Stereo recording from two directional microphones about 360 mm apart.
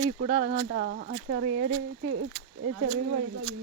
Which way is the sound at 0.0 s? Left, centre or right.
Right.